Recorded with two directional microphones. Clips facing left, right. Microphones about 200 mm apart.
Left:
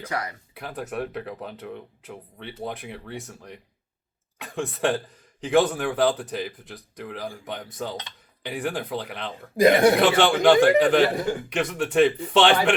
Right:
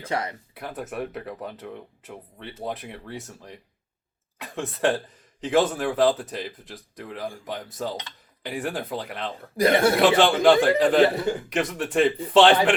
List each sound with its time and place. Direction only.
0.1 s speech: 25° right (ahead or behind)
0.5 s speech: centre (ahead or behind)
9.6 s speech: 15° left (ahead or behind)
10.0 s speech: centre (ahead or behind)